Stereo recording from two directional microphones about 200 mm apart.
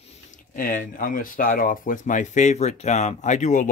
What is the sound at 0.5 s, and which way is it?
Speech, 45° left (ahead or behind).